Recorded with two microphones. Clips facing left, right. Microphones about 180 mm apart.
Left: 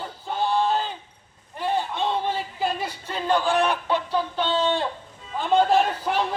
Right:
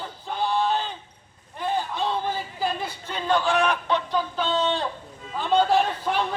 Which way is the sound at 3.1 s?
10° left (ahead or behind).